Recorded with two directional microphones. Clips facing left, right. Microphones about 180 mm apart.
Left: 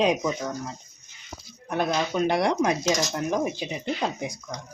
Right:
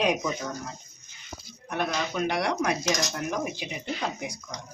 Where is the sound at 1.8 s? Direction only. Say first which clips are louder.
Left 4 dB; 30° left (ahead or behind).